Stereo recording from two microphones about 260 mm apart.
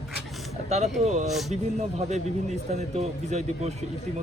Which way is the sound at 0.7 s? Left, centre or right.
Right.